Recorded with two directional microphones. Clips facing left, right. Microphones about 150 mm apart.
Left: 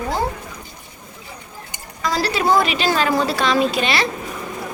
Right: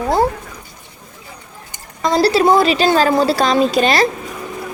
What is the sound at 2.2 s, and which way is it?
A woman's voice, 35° right (ahead or behind).